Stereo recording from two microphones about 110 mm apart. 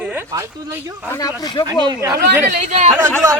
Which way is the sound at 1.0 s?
30° left (ahead or behind).